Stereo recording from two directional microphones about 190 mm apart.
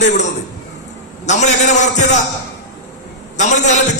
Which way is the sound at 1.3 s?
40° left (ahead or behind).